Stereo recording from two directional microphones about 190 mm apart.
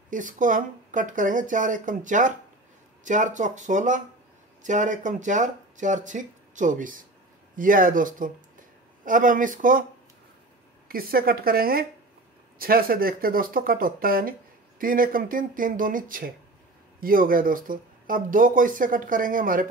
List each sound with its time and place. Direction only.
0.1 s speech: 45° right (ahead or behind)
10.9 s speech: 50° right (ahead or behind)